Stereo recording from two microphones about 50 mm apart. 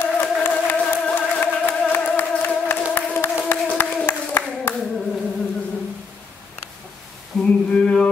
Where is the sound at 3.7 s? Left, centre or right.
Left.